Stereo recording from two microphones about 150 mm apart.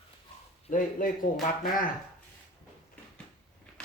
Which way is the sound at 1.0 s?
65° left (ahead or behind).